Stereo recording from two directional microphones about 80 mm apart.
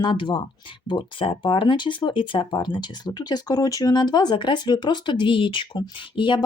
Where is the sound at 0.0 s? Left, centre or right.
Left.